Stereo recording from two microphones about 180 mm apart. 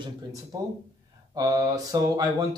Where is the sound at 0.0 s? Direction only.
20° right (ahead or behind).